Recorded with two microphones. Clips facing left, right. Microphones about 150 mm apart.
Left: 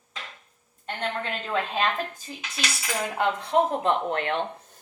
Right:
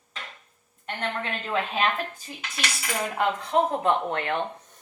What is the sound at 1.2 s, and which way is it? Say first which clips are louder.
A woman's voice: right 1 dB; 5° right (ahead or behind).